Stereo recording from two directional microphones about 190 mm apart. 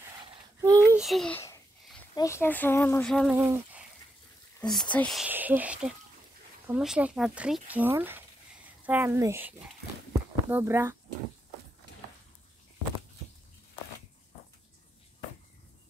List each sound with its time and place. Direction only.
0.6 s a sound: 15° right (ahead or behind)
0.9 s a child's voice: centre (ahead or behind)
2.1 s speech: 15° left (ahead or behind)
3.3 s speech: 15° right (ahead or behind)
4.6 s speech: 5° left (ahead or behind); by 11.0 s 15° right (ahead or behind)